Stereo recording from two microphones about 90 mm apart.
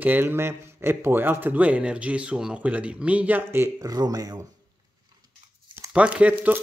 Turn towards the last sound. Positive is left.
turn(degrees=-15)  # may be behind; listen again after turning